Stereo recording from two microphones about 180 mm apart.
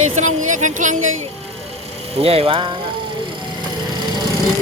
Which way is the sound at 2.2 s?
35° right (ahead or behind).